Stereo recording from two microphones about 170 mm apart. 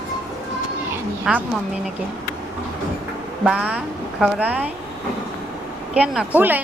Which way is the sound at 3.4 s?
5° right (ahead or behind).